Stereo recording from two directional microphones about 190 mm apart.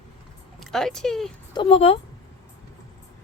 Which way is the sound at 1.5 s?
30° left (ahead or behind).